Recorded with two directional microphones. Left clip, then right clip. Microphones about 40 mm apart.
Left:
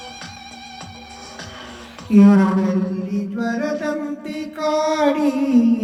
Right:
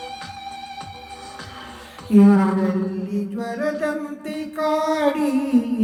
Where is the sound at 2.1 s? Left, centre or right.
Left.